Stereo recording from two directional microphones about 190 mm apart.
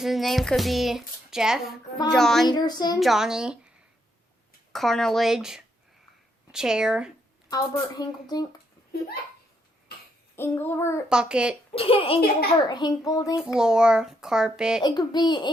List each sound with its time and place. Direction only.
0.0 s music: centre (ahead or behind)
2.5 s speech: 20° left (ahead or behind)
3.0 s music: centre (ahead or behind)
4.7 s music: centre (ahead or behind)
7.5 s speech: 20° left (ahead or behind)
10.3 s child singing: 10° left (ahead or behind)
11.1 s music: 5° right (ahead or behind)
11.7 s a woman's voice: 30° left (ahead or behind)
13.6 s music: 5° right (ahead or behind)
14.8 s speech: 20° left (ahead or behind)